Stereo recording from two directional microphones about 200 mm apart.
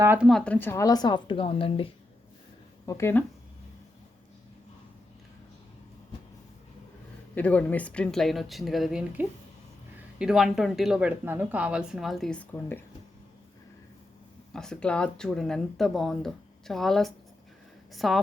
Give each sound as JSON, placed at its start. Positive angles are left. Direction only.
{"t": 0.0, "sound": "speech", "side_deg": -10}
{"t": 0.3, "sound": "speech", "side_deg": 5}
{"t": 2.8, "sound": "speech", "side_deg": 15}
{"t": 7.3, "sound": "speech", "side_deg": 5}
{"t": 14.5, "sound": "speech", "side_deg": 5}